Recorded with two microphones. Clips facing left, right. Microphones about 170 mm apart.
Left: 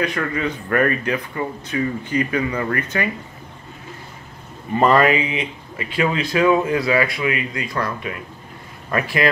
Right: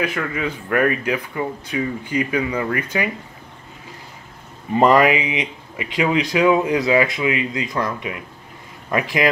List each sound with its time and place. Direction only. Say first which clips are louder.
0.0 s speech: left 1 dB; 5° right (ahead or behind)
4.7 s speech: right 1 dB; 15° right (ahead or behind)